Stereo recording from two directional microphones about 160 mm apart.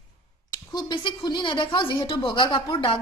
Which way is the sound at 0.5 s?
25° left (ahead or behind).